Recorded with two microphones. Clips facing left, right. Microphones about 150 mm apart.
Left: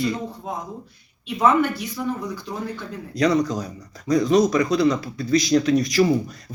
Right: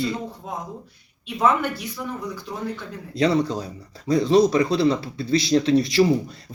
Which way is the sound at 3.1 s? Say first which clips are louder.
Left 1 dB; 30° right (ahead or behind).